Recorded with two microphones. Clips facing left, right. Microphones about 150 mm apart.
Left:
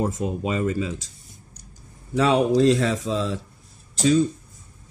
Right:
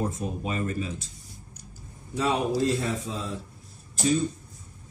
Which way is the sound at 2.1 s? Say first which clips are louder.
Left 7 dB; 75° left (ahead or behind).